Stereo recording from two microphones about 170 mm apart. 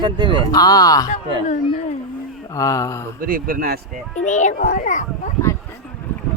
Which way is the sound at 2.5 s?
20° left (ahead or behind).